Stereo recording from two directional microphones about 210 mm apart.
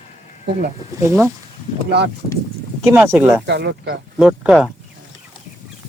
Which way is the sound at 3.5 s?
55° right (ahead or behind).